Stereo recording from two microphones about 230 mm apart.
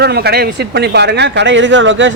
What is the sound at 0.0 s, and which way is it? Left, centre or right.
Speech, right.